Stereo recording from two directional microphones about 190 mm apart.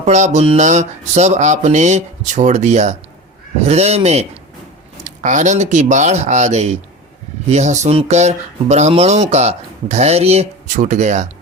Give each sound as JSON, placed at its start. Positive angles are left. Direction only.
{"t": 0.0, "sound": "speech", "side_deg": -35}